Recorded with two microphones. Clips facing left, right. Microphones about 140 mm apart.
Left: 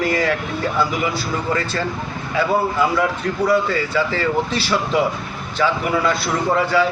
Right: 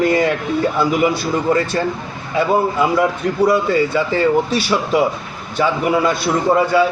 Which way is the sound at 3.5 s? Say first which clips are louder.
Right 3 dB; 20° right (ahead or behind).